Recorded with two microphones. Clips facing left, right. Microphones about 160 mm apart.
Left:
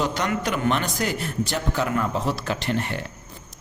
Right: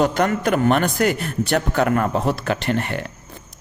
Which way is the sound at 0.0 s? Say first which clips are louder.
Right 6 dB; 50° right (ahead or behind).